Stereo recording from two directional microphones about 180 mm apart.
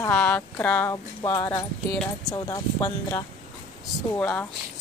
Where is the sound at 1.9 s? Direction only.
5° left (ahead or behind).